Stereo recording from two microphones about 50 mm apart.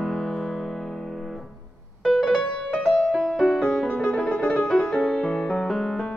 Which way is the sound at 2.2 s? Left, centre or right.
Centre.